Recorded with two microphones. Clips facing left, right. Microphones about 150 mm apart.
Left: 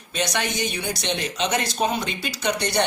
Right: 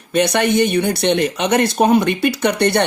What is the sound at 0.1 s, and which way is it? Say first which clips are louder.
Speech: right 11 dB; 60° right (ahead or behind).